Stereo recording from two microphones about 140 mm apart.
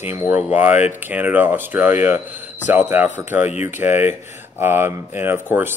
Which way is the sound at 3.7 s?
15° right (ahead or behind).